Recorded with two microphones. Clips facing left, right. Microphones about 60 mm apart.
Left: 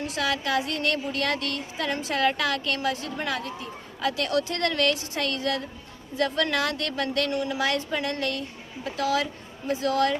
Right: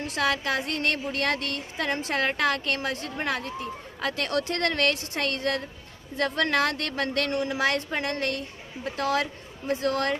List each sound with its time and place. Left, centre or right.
0.1 s a woman's voice: right